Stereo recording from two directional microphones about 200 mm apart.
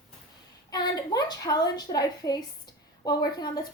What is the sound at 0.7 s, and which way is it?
A woman's voice, 20° left (ahead or behind).